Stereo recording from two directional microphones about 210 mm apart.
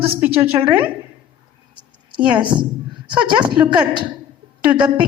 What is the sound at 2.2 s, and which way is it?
Speech, 5° right (ahead or behind).